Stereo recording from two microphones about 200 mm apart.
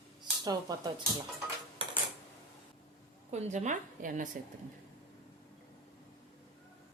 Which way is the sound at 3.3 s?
35° right (ahead or behind).